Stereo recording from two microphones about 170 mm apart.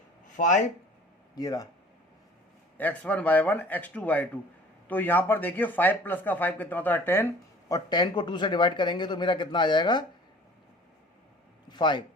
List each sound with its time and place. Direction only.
0.3 s speech: 50° left (ahead or behind)
1.4 s speech: 20° left (ahead or behind)
2.7 s speech: 10° left (ahead or behind)
7.7 s speech: 25° left (ahead or behind)
11.7 s speech: 25° left (ahead or behind)